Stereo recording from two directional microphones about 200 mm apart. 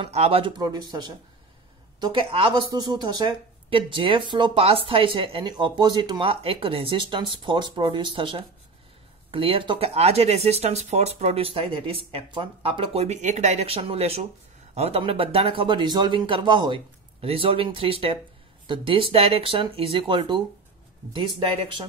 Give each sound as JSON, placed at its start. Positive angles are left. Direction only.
{"t": 0.0, "sound": "speech", "side_deg": -30}